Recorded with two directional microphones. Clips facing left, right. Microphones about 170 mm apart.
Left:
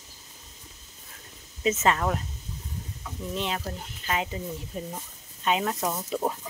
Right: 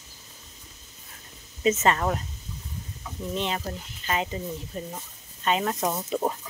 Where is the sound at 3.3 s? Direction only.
5° left (ahead or behind).